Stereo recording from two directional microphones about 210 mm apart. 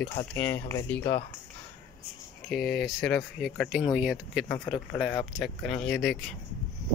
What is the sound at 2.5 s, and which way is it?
Speech, centre (ahead or behind).